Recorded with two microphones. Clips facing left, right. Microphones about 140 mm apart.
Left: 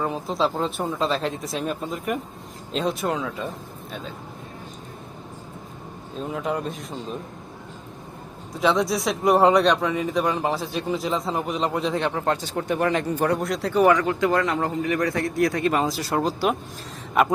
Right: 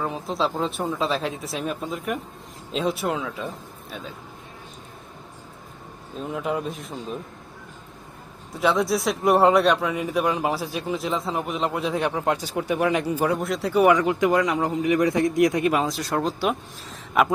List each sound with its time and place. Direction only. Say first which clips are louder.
0.0 s speech: left 2 dB; centre (ahead or behind)
6.1 s speech: even; centre (ahead or behind)
8.6 s speech: even; centre (ahead or behind)
15.7 s speech: even; centre (ahead or behind)